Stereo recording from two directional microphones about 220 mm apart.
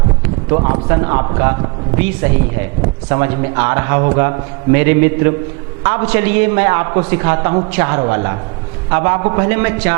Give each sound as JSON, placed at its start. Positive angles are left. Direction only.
{"t": 0.5, "sound": "a man's voice", "side_deg": -25}
{"t": 3.1, "sound": "a man's voice", "side_deg": -15}